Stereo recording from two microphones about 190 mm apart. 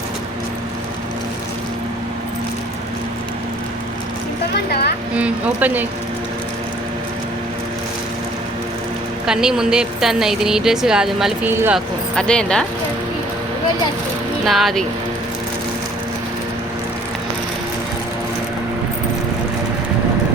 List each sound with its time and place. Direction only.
4.5 s music: 60° left (ahead or behind)
5.1 s speech: 10° right (ahead or behind)
9.2 s speech: 5° right (ahead or behind)
12.1 s speech: 5° left (ahead or behind)
14.4 s speech: centre (ahead or behind)